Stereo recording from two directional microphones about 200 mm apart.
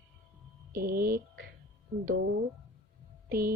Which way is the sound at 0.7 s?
50° right (ahead or behind).